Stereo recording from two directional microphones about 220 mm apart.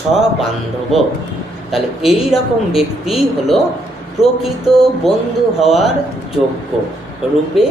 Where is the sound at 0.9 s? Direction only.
Centre (ahead or behind).